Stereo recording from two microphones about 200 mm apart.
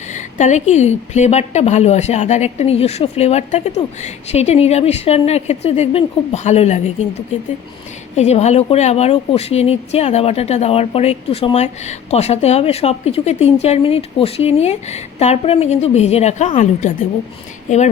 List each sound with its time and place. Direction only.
0.1 s speech: 35° left (ahead or behind)
8.1 s speech: 35° left (ahead or behind)